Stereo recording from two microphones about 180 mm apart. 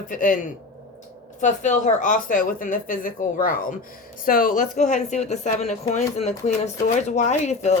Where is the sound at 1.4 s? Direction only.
45° left (ahead or behind).